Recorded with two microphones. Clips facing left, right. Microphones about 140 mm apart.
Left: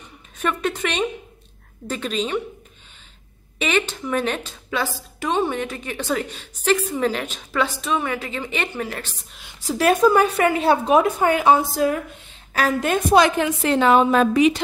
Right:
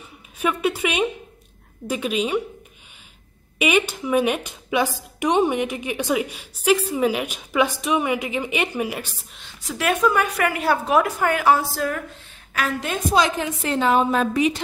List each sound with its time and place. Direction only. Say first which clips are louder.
0.4 s a woman's voice: right 1 dB; 10° right (ahead or behind)
3.5 s a woman's voice: right 2 dB; 10° right (ahead or behind)
9.6 s a woman's voice: left 4 dB; 35° left (ahead or behind)
12.8 s a woman's voice: left 5 dB; 60° left (ahead or behind); by 14.6 s 90° left